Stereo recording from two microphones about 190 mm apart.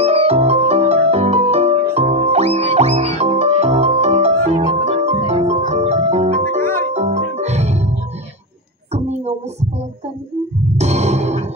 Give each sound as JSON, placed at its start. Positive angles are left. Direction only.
{"t": 0.0, "sound": "music", "side_deg": -30}
{"t": 8.9, "sound": "a sound", "side_deg": -35}
{"t": 10.8, "sound": "music", "side_deg": -35}